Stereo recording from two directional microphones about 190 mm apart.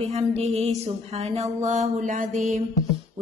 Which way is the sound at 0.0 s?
35° right (ahead or behind).